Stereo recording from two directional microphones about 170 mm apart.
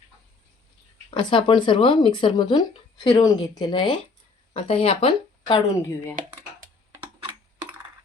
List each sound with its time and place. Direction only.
1.2 s speech: 30° left (ahead or behind)
6.2 s speech: 50° right (ahead or behind)